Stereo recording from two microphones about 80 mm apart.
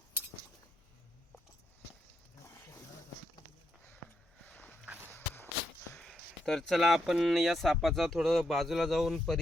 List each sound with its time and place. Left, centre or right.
4.4 s walk: left
6.0 s speech: centre